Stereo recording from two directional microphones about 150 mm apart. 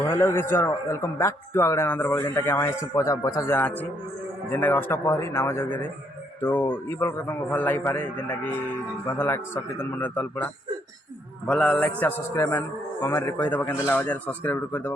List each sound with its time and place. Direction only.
0.1 s a man's voice: 15° left (ahead or behind)